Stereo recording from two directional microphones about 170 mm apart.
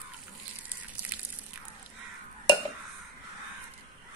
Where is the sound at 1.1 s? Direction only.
10° right (ahead or behind).